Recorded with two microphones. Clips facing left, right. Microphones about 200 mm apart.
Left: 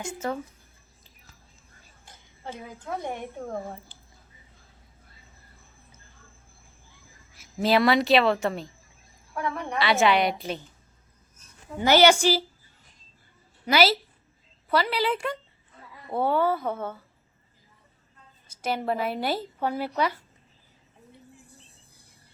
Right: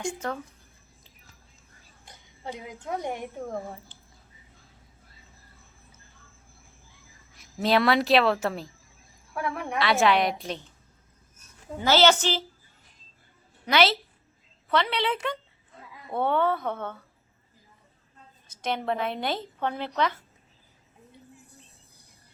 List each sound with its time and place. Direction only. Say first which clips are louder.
0.2 s speech: left 6 dB; 5° left (ahead or behind)
2.0 s a woman's voice: right 2 dB; 15° right (ahead or behind)
7.3 s speech: left 1 dB; centre (ahead or behind)
11.9 s a woman's voice: left 3 dB; 15° left (ahead or behind)
13.7 s a woman's voice: left 1 dB; 5° left (ahead or behind)
18.6 s a woman's voice: left 1 dB; 5° left (ahead or behind)